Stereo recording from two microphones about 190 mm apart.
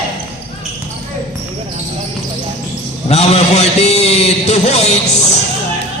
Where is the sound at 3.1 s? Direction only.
35° left (ahead or behind).